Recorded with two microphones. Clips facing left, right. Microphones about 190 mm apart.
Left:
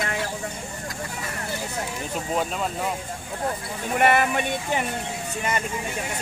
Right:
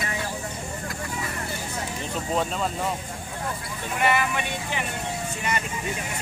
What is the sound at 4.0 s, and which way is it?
Speech, 50° left (ahead or behind).